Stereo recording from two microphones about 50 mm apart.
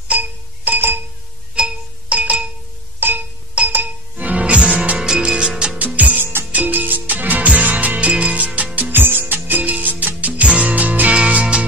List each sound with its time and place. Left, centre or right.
0.1 s music: right
1.5 s music: centre
3.0 s music: right; by 5.8 s centre
5.9 s music: right
8.7 s music: right